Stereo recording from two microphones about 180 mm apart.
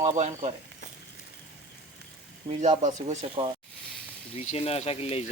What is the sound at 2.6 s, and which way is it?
Speech, 40° right (ahead or behind).